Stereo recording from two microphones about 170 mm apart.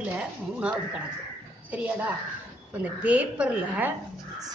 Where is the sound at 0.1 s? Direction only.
5° right (ahead or behind).